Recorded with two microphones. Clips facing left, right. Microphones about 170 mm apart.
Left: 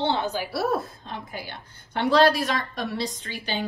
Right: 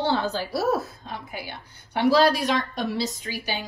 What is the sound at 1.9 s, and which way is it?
A woman's voice, 5° right (ahead or behind).